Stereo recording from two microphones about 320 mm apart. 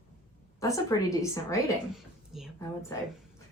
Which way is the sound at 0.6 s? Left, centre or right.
Centre.